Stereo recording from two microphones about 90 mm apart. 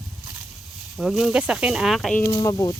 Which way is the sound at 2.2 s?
35° left (ahead or behind).